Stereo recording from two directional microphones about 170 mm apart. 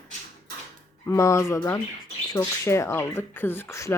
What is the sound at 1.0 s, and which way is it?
Speech, 15° left (ahead or behind).